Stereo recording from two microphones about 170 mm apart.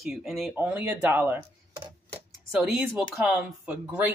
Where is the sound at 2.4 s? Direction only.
5° right (ahead or behind).